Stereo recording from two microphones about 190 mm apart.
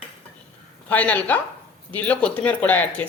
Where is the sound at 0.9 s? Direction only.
10° left (ahead or behind).